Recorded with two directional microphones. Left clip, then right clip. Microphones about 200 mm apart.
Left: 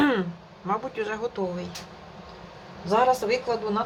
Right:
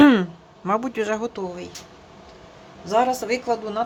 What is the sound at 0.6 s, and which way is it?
A woman's voice, 55° right (ahead or behind).